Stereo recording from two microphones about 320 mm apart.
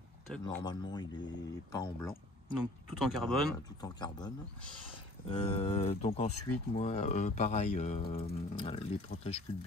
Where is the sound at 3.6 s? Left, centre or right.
Centre.